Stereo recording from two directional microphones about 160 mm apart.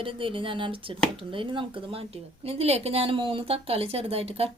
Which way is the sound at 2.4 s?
40° right (ahead or behind).